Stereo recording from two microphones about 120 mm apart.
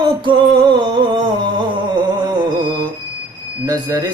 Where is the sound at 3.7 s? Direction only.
35° right (ahead or behind).